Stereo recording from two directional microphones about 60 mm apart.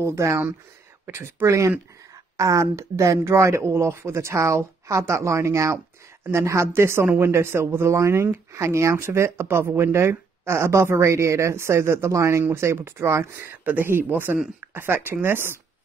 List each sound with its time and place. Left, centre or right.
0.0 s speech: right
2.3 s speech: right